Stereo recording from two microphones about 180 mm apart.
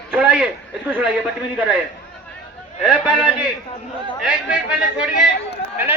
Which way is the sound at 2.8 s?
5° right (ahead or behind).